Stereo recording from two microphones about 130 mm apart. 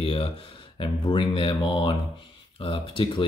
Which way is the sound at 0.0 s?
45° left (ahead or behind).